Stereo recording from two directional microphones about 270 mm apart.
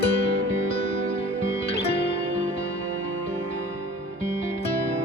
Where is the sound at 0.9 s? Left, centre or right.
Right.